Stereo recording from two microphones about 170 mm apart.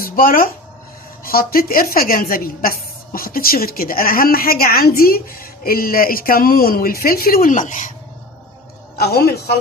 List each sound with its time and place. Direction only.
0.0 s a woman's voice: 60° left (ahead or behind)
9.0 s a woman's voice: 65° left (ahead or behind)